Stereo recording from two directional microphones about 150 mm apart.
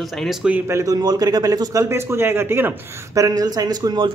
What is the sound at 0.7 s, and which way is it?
A man's voice, 20° right (ahead or behind).